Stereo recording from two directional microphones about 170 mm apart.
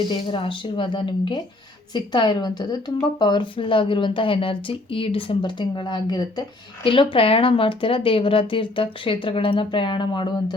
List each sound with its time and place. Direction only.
0.1 s a woman's voice: 30° left (ahead or behind)